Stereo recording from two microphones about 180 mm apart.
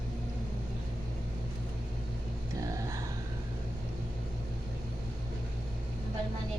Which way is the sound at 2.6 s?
20° right (ahead or behind).